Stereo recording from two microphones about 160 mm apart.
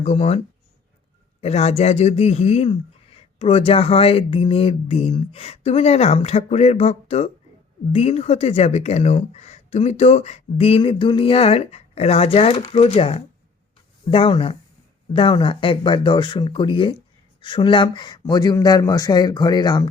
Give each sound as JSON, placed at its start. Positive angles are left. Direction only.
{"t": 0.0, "sound": "speech", "side_deg": 40}
{"t": 1.4, "sound": "speech", "side_deg": 40}